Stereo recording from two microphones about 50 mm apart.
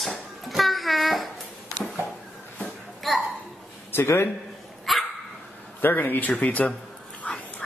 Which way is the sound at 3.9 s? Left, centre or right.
Left.